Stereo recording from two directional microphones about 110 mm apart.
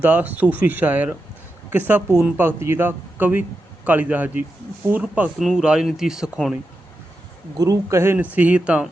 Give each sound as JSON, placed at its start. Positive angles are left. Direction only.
{"t": 0.0, "sound": "speech", "side_deg": -15}
{"t": 5.4, "sound": "speech", "side_deg": 0}
{"t": 7.6, "sound": "speech", "side_deg": -30}